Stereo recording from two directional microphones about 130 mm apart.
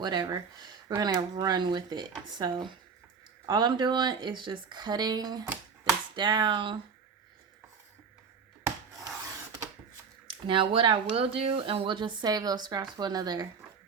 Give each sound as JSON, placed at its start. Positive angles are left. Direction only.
{"t": 0.0, "sound": "speech", "side_deg": -35}
{"t": 8.6, "sound": "rub", "side_deg": -25}
{"t": 10.4, "sound": "speech", "side_deg": -40}